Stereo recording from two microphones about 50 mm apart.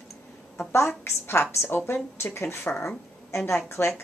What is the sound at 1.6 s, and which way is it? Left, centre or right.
Speech, left.